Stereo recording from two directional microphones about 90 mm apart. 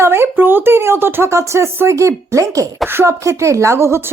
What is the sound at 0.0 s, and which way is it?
Speech, 30° right (ahead or behind).